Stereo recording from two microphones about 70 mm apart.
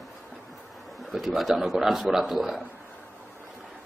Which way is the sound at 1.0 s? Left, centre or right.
Centre.